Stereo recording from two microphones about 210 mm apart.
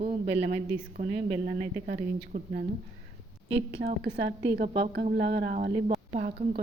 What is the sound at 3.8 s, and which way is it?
Speech, 50° right (ahead or behind).